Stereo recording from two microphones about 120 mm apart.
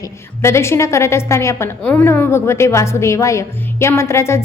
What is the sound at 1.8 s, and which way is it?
Speech, 10° left (ahead or behind).